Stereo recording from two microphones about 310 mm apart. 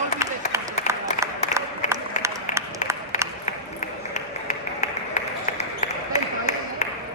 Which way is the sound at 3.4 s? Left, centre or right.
Left.